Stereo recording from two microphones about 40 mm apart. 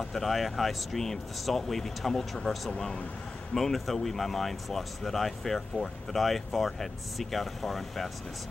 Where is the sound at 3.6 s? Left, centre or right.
Centre.